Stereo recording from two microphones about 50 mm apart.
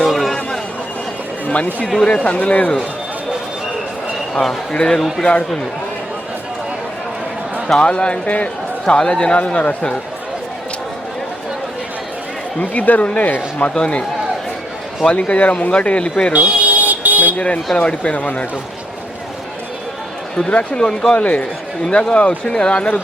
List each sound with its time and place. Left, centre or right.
0.0 s a sound: centre
1.5 s speech: left
4.7 s speech: centre
4.9 s speech: centre
7.8 s speech: centre
12.5 s speech: left
15.1 s speech: left
16.3 s vehicle: right
17.3 s speech: left
20.5 s speech: left
21.2 s speech: left